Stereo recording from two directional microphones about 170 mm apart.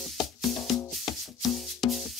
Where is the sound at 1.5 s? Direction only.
Centre (ahead or behind).